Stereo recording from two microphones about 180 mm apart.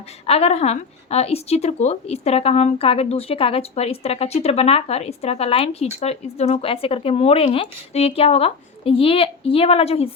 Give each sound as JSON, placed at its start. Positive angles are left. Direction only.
{"t": 0.3, "sound": "speech", "side_deg": 35}